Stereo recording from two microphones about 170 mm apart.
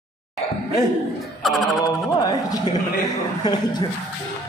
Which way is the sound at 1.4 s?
Centre (ahead or behind).